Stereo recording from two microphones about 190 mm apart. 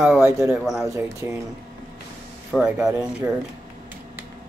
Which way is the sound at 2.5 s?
5° right (ahead or behind).